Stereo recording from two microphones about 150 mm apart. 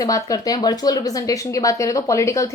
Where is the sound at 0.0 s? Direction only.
25° left (ahead or behind).